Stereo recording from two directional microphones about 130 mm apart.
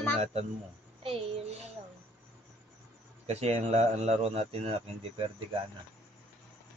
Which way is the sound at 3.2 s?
55° right (ahead or behind).